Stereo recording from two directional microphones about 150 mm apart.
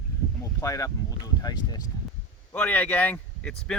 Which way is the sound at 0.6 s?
20° left (ahead or behind).